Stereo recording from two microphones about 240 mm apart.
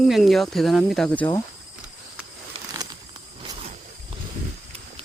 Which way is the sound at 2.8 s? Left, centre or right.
Centre.